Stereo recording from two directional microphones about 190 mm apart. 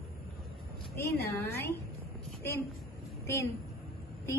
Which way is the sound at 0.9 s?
15° left (ahead or behind).